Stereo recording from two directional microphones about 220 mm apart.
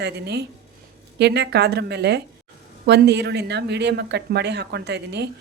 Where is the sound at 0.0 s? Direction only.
50° right (ahead or behind).